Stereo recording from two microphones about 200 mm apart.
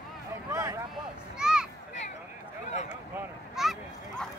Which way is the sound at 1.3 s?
5° right (ahead or behind).